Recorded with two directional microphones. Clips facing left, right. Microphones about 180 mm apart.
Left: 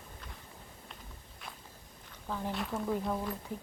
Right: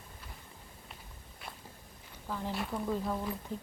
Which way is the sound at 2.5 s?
Centre (ahead or behind).